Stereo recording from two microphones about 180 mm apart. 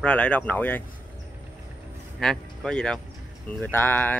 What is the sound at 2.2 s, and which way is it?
Speech, 5° left (ahead or behind).